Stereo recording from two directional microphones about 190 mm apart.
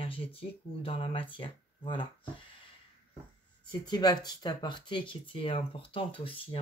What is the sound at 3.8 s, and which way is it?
Speech, 20° left (ahead or behind).